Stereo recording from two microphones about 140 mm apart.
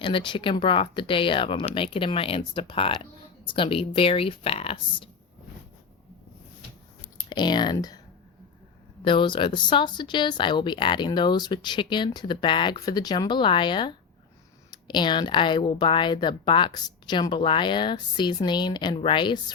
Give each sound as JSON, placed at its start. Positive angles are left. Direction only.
{"t": 0.0, "sound": "speech", "side_deg": 40}
{"t": 7.3, "sound": "speech", "side_deg": 30}
{"t": 9.0, "sound": "speech", "side_deg": 35}